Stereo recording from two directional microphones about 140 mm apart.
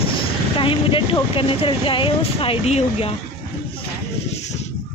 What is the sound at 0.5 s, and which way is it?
Speech, 40° left (ahead or behind).